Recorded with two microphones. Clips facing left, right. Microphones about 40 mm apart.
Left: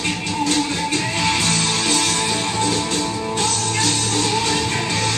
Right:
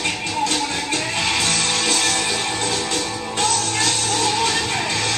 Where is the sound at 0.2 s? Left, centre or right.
Right.